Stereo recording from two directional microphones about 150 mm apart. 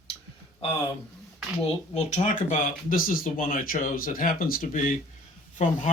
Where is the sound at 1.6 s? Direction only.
45° left (ahead or behind); by 4.9 s 60° left (ahead or behind).